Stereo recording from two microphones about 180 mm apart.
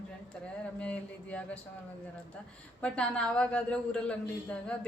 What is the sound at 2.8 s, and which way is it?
A woman's voice, 5° left (ahead or behind).